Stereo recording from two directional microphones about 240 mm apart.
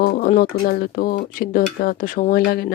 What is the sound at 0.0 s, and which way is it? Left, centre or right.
Speech, left.